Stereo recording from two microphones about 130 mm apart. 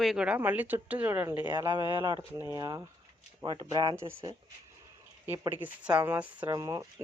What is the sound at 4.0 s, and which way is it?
Speech, 20° right (ahead or behind).